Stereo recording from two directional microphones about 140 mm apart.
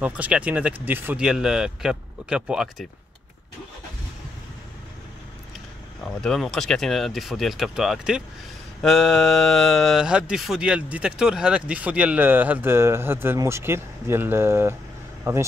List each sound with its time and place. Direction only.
0.0 s speech: 10° right (ahead or behind)
6.2 s speech: 5° left (ahead or behind); by 15.4 s 20° right (ahead or behind)